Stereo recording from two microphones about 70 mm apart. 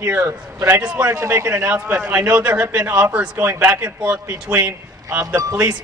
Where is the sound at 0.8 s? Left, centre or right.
Right.